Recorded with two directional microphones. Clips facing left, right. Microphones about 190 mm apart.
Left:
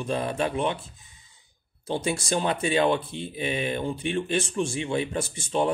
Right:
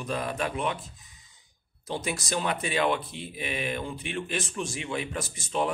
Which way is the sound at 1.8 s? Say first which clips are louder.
Left 5 dB; 30° left (ahead or behind).